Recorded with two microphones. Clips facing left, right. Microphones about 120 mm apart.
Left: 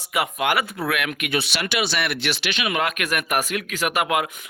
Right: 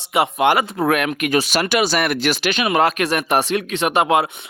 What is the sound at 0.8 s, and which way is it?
Speech, 40° right (ahead or behind).